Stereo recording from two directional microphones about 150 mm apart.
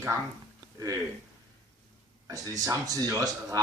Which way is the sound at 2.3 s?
20° right (ahead or behind).